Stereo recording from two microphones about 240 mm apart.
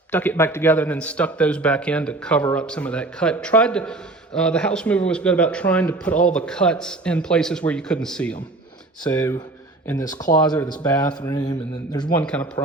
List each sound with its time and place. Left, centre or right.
0.1 s a man's voice: centre
12.2 s a man's voice: centre